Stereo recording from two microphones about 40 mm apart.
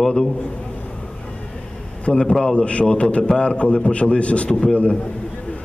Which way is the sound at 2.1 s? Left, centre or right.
Centre.